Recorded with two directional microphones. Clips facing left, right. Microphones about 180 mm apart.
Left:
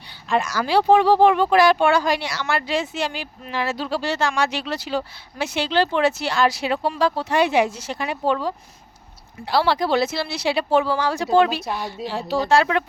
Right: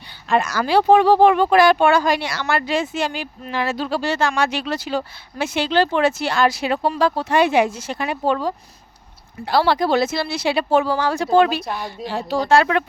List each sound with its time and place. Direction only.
0.3 s speech: 60° right (ahead or behind)
11.6 s a woman's voice: 5° left (ahead or behind)
12.0 s speech: 50° right (ahead or behind)